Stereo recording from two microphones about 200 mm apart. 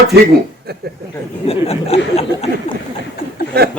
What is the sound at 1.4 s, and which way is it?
Speech, 30° left (ahead or behind).